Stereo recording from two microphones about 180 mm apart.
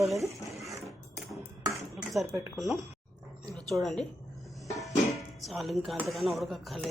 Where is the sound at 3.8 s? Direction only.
5° left (ahead or behind).